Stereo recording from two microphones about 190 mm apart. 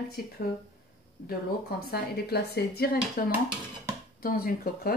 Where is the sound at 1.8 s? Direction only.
55° left (ahead or behind).